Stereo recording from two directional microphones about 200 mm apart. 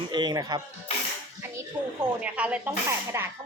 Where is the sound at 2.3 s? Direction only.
5° right (ahead or behind).